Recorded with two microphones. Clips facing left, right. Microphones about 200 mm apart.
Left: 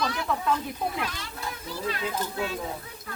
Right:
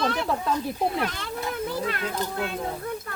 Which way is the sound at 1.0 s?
55° right (ahead or behind).